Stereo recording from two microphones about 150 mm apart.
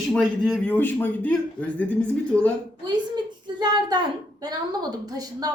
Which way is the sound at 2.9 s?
30° right (ahead or behind).